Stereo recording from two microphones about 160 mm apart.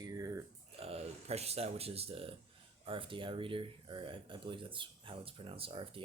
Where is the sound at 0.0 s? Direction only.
20° right (ahead or behind).